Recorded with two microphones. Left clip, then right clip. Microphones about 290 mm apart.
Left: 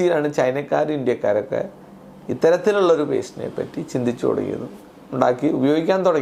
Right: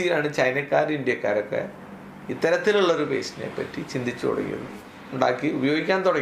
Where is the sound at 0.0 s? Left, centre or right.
Left.